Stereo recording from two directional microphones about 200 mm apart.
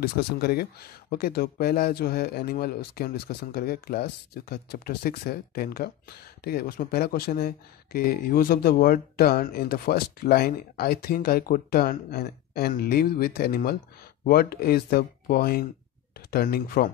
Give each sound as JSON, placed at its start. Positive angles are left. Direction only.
{"t": 0.0, "sound": "speech", "side_deg": 50}